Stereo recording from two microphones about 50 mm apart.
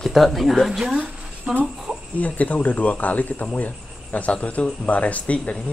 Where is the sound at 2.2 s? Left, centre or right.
Left.